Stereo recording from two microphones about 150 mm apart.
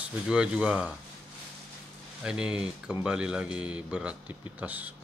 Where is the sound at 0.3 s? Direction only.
5° right (ahead or behind).